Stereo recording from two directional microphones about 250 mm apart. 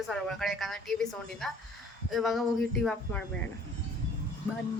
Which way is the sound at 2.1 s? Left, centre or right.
Centre.